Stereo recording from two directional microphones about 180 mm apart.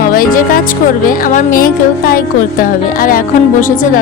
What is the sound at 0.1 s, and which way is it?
Speech, 50° left (ahead or behind).